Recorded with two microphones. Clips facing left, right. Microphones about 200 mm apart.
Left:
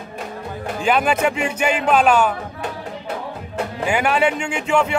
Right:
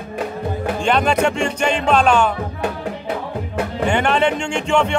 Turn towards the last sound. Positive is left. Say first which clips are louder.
# right 1 dB
turn(degrees=5)  # may be behind; listen again after turning